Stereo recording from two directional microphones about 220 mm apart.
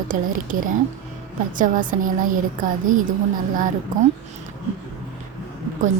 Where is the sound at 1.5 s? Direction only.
35° right (ahead or behind).